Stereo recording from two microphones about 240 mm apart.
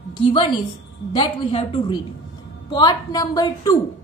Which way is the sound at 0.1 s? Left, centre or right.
Centre.